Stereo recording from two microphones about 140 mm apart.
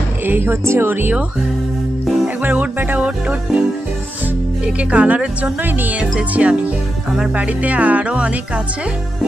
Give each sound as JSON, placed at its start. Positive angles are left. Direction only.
{"t": 0.2, "sound": "speech", "side_deg": -15}
{"t": 2.0, "sound": "music", "side_deg": -10}
{"t": 4.7, "sound": "speech", "side_deg": -10}